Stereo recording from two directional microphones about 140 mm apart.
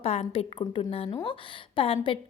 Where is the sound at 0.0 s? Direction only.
45° left (ahead or behind).